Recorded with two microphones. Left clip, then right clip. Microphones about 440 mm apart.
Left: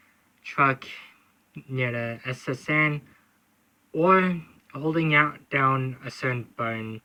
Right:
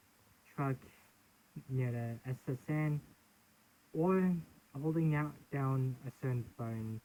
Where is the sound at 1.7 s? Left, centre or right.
Centre.